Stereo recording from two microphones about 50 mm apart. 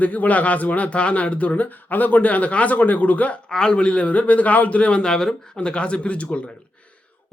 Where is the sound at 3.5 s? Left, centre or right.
Centre.